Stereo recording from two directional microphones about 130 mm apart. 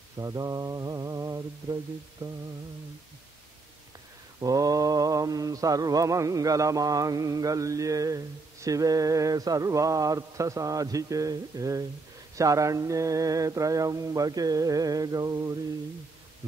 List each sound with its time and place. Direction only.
0.2 s mantra: 25° right (ahead or behind)
2.2 s a sound: 15° right (ahead or behind)
4.4 s mantra: 25° right (ahead or behind)